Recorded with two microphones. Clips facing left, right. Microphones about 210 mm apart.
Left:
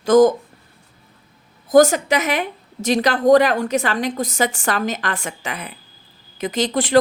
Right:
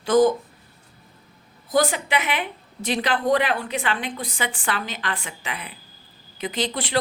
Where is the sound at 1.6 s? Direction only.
45° left (ahead or behind).